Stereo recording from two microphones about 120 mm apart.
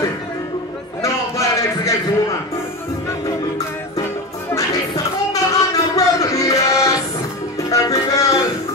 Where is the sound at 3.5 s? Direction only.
25° left (ahead or behind).